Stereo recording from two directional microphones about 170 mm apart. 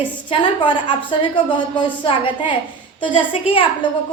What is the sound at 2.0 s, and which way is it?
A woman's voice, 30° left (ahead or behind).